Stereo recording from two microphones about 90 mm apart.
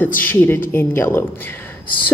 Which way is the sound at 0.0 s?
20° left (ahead or behind).